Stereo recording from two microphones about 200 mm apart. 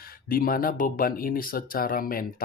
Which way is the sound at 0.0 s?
45° left (ahead or behind).